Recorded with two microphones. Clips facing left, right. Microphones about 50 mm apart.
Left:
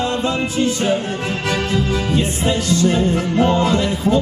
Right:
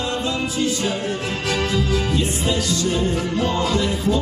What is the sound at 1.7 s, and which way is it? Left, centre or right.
Music, left.